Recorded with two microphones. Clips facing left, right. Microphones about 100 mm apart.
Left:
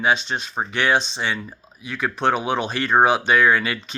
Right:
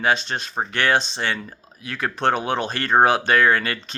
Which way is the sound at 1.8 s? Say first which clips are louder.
Even; 40° right (ahead or behind).